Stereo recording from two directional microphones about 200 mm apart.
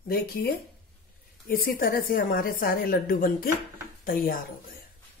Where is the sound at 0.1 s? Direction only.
50° left (ahead or behind).